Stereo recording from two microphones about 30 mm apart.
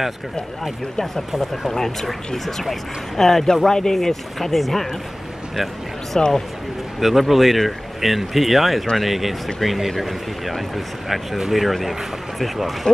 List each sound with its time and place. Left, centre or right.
1.7 s speech: centre
6.2 s speech: left
7.0 s speech: centre
11.3 s speech: centre
12.4 s speech: centre